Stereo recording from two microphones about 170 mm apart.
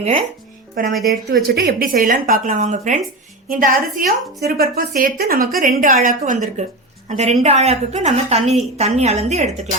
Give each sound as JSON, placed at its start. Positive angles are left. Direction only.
{"t": 0.0, "sound": "a woman's voice", "side_deg": -40}
{"t": 0.8, "sound": "a woman's voice", "side_deg": -55}